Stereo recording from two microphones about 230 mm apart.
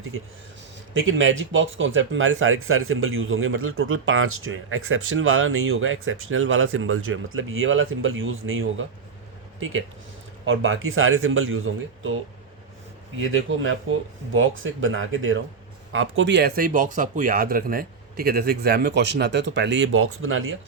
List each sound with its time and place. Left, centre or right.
0.9 s speech: right
10.4 s speech: right
13.1 s speech: right